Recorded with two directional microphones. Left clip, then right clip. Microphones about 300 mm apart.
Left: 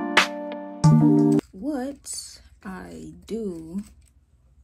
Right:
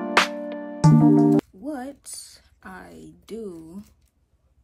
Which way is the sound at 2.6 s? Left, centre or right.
Right.